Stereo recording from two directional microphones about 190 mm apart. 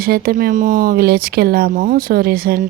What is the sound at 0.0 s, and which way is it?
Speech, 50° right (ahead or behind).